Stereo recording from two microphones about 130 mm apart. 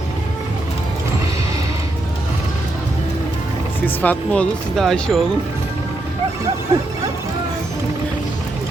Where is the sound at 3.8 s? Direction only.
15° left (ahead or behind).